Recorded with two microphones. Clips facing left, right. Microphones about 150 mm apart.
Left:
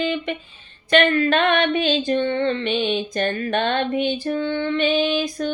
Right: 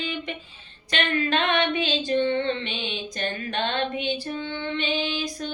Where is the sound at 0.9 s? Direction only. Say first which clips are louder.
Left 8 dB; 55° left (ahead or behind).